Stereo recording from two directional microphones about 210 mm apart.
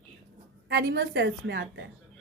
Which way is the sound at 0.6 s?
55° right (ahead or behind).